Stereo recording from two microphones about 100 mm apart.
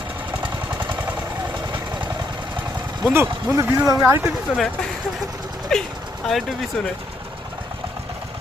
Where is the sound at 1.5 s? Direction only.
50° right (ahead or behind).